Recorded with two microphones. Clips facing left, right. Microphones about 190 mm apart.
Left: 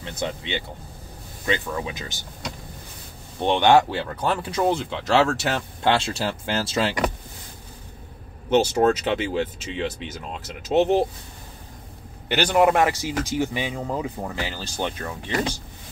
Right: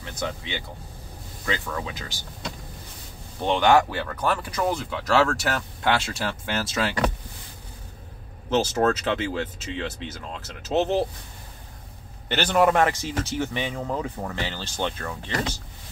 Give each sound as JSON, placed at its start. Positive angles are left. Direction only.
{"t": 0.0, "sound": "speech", "side_deg": 20}
{"t": 3.4, "sound": "speech", "side_deg": 25}
{"t": 8.7, "sound": "speech", "side_deg": 15}
{"t": 12.3, "sound": "speech", "side_deg": 10}